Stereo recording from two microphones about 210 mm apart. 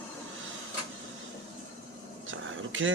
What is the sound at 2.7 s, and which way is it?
Speech, 65° right (ahead or behind).